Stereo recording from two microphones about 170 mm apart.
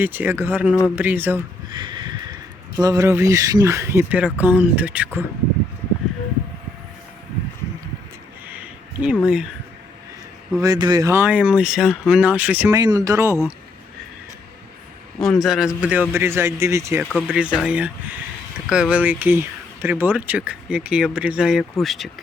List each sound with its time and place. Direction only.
0.0 s speech: 10° right (ahead or behind)
1.7 s a sound: 25° right (ahead or behind)
2.7 s speech: 20° right (ahead or behind)
8.4 s a sound: 10° right (ahead or behind)
9.2 s speech: 5° right (ahead or behind)
10.6 s speech: 25° right (ahead or behind)
15.2 s speech: centre (ahead or behind); by 17.1 s 15° right (ahead or behind)
17.1 s speech: centre (ahead or behind)